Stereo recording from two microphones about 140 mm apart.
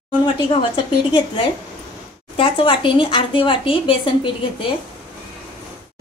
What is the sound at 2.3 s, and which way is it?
Speech, 40° left (ahead or behind).